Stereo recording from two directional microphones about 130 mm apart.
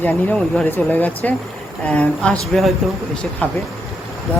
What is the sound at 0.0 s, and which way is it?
Speech, 5° left (ahead or behind).